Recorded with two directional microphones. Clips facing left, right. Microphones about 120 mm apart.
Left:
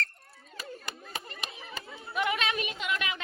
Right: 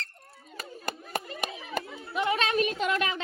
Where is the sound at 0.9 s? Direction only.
50° right (ahead or behind).